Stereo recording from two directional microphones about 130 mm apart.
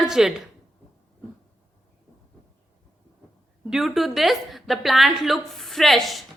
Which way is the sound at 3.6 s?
Centre (ahead or behind).